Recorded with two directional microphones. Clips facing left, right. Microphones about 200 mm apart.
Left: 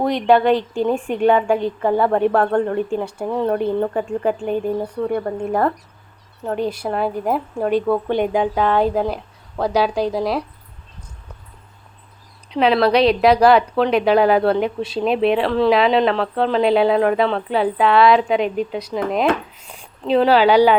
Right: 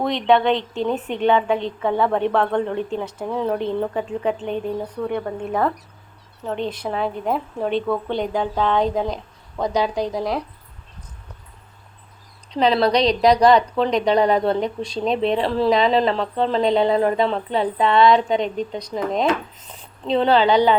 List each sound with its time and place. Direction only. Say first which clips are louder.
0.0 s a woman's voice: left 2 dB; 10° left (ahead or behind)
12.5 s speech: left 2 dB; 5° left (ahead or behind)
19.5 s a sound: left 2 dB; 10° left (ahead or behind)